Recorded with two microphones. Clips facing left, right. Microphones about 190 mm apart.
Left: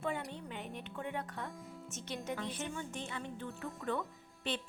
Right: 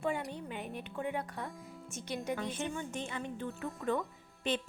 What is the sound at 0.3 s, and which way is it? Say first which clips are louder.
Music: right 3 dB; 10° right (ahead or behind).